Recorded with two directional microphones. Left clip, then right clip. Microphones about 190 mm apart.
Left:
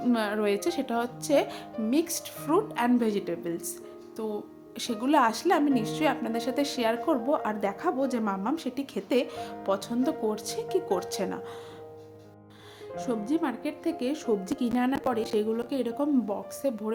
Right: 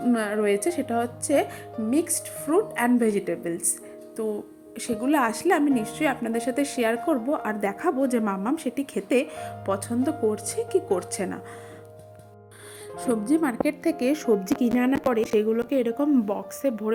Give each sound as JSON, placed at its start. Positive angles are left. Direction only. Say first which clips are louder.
{"t": 0.0, "sound": "speech", "louder": "right 3 dB", "side_deg": -5}
{"t": 13.0, "sound": "speech", "louder": "right 5 dB", "side_deg": -30}
{"t": 14.8, "sound": "speech", "louder": "right 3 dB", "side_deg": -5}
{"t": 16.2, "sound": "speech", "louder": "right 4 dB", "side_deg": -20}